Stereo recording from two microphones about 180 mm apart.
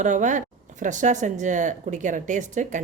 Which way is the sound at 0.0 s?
45° right (ahead or behind).